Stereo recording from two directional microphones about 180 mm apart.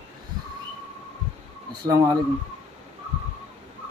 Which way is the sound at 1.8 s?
20° right (ahead or behind).